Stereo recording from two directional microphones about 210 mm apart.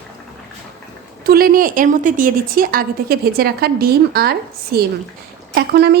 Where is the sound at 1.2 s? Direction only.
45° right (ahead or behind).